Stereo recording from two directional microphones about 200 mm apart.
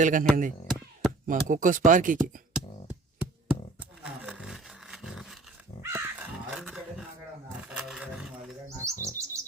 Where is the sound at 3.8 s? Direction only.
5° right (ahead or behind).